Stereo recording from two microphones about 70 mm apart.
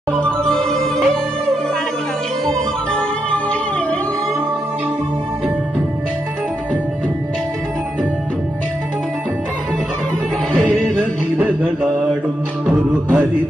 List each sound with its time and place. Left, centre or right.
0.1 s music: centre
2.4 s music: centre
10.6 s music: centre
10.9 s music: centre